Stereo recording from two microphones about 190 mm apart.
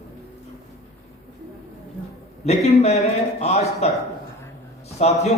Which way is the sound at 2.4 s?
35° left (ahead or behind).